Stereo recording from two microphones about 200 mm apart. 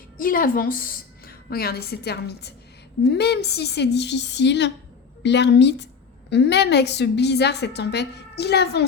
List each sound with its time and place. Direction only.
0.2 s a woman's voice: 45° left (ahead or behind)